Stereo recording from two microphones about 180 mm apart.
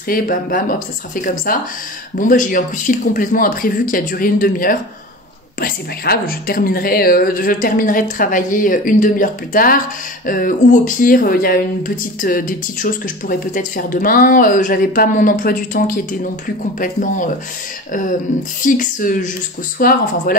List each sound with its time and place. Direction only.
0.1 s speech: 50° left (ahead or behind)
18.6 s speech: 45° left (ahead or behind)